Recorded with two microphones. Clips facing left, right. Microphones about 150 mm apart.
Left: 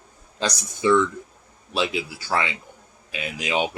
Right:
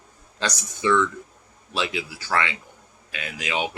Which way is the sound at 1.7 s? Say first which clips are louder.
Left 3 dB; 30° left (ahead or behind).